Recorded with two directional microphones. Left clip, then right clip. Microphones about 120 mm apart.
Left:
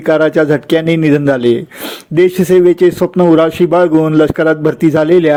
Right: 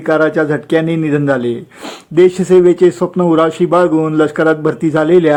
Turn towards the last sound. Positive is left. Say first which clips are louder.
# left 1 dB
turn(degrees=30)  # may be behind; listen again after turning